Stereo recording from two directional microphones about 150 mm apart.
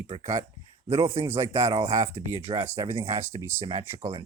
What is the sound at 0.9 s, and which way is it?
Speech, 15° right (ahead or behind).